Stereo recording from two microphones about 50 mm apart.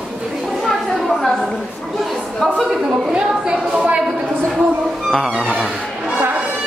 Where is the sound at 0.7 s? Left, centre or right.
Centre.